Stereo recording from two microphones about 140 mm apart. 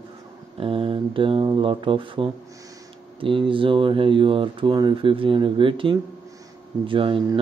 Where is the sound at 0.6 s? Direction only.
40° right (ahead or behind).